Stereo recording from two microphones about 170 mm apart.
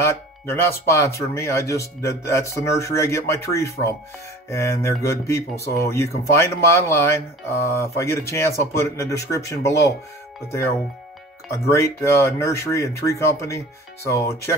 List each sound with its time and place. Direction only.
0.0 s speech: 15° left (ahead or behind)
11.7 s speech: 15° left (ahead or behind)